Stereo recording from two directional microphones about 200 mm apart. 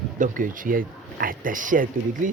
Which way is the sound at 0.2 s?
40° right (ahead or behind).